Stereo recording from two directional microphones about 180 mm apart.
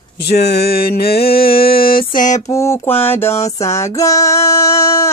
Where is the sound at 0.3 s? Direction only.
65° left (ahead or behind); by 2.4 s 45° left (ahead or behind).